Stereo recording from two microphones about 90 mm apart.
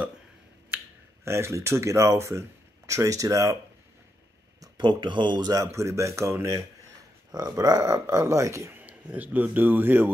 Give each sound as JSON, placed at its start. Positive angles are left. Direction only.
{"t": 1.2, "sound": "speech", "side_deg": -30}
{"t": 4.6, "sound": "speech", "side_deg": -55}
{"t": 7.3, "sound": "speech", "side_deg": -45}
{"t": 8.8, "sound": "a man's voice", "side_deg": -20}